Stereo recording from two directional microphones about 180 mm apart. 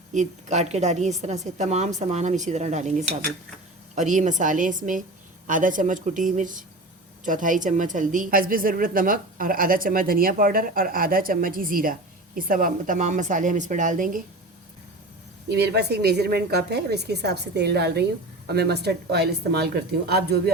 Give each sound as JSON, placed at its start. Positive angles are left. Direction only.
{"t": 0.1, "sound": "a woman's voice", "side_deg": -40}
{"t": 15.4, "sound": "a woman's voice", "side_deg": -65}